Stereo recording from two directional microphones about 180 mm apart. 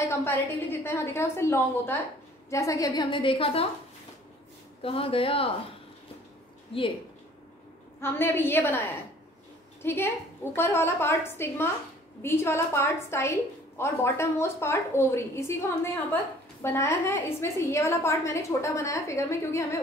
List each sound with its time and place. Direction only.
0.0 s a woman's voice: 15° left (ahead or behind); by 3.6 s 30° left (ahead or behind)
4.8 s speech: 30° left (ahead or behind)
8.0 s a woman's voice: 10° left (ahead or behind)